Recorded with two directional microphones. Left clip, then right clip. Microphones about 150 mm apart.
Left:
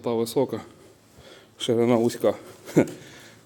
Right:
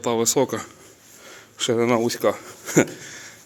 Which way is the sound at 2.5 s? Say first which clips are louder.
Right 2 dB; 5° left (ahead or behind).